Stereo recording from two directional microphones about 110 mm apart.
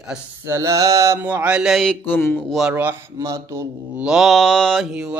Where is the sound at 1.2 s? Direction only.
15° right (ahead or behind); by 2.0 s 5° left (ahead or behind).